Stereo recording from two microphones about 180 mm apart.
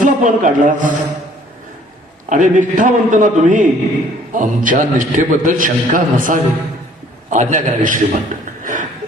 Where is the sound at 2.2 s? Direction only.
45° right (ahead or behind).